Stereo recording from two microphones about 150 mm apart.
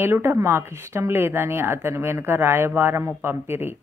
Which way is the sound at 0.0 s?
15° right (ahead or behind).